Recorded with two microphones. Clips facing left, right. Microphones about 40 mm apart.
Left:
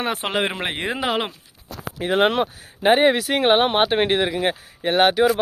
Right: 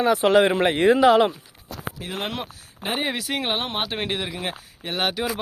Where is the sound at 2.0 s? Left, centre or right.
Left.